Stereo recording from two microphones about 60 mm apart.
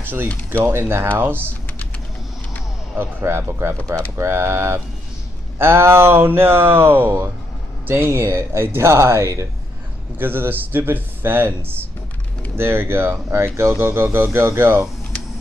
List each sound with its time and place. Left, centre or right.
0.7 s speech: right
3.0 s speech: right
10.1 s speech: right